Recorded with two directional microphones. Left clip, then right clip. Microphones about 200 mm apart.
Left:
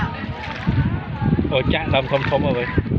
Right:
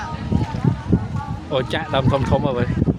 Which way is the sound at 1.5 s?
15° right (ahead or behind).